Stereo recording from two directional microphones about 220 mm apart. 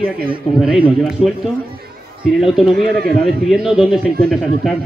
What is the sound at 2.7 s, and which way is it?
Speech, 45° right (ahead or behind).